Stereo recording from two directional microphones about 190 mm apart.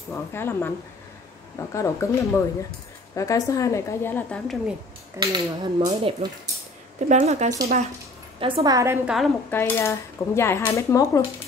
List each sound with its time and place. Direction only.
0.1 s dishes: 10° left (ahead or behind)
5.2 s speech: 20° right (ahead or behind)
7.1 s speech: 35° right (ahead or behind); by 8.9 s 20° right (ahead or behind)
9.0 s a woman's voice: centre (ahead or behind)
9.5 s dishes: 10° left (ahead or behind)